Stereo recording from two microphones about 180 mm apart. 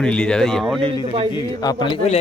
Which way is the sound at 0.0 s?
5° left (ahead or behind).